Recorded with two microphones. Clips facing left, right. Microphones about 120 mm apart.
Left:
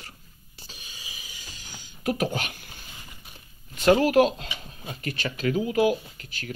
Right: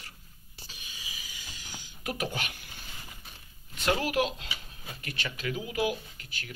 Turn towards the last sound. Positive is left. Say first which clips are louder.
# left 7 dB
turn(degrees=40)  # may be behind; listen again after turning